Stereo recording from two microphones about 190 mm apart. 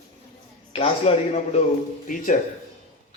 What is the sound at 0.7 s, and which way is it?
Speech, 30° left (ahead or behind).